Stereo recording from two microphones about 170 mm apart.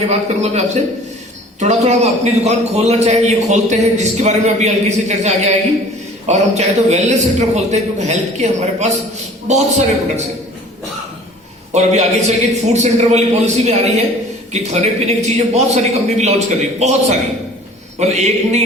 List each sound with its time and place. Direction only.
0.1 s a man's voice: 40° right (ahead or behind)
11.7 s a man's voice: 40° right (ahead or behind)